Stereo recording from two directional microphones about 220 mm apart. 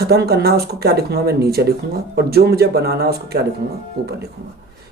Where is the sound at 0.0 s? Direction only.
45° right (ahead or behind).